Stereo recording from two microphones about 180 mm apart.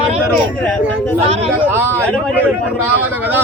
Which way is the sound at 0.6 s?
5° left (ahead or behind).